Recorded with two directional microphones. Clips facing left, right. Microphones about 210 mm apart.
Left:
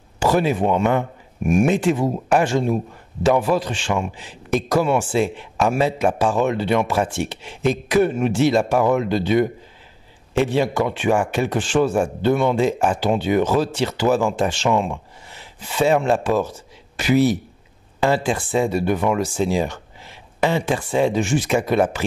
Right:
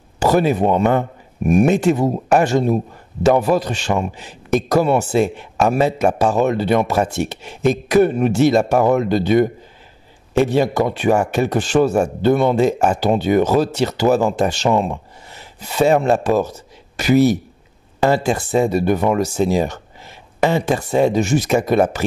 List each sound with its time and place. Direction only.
0.2 s speech: 40° right (ahead or behind)